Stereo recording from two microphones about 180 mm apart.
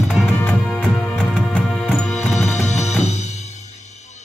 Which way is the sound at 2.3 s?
40° left (ahead or behind).